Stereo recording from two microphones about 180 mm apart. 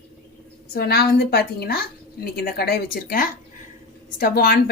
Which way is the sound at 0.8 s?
60° left (ahead or behind).